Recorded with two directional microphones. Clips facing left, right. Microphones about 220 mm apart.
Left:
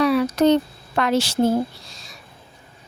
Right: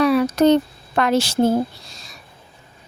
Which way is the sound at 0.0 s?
45° right (ahead or behind).